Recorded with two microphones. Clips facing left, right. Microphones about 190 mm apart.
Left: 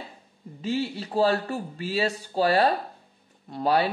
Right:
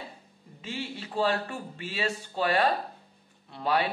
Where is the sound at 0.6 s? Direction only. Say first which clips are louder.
Left 9 dB; 40° left (ahead or behind).